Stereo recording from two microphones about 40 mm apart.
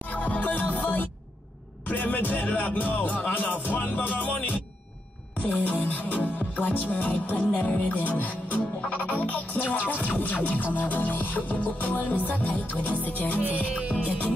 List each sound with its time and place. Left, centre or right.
0.1 s music: left
13.4 s music: right
14.0 s music: left